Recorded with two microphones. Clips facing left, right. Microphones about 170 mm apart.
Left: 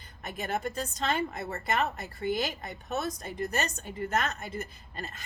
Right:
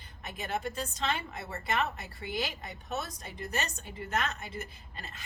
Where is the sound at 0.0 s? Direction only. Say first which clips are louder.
Left 4 dB; 45° left (ahead or behind).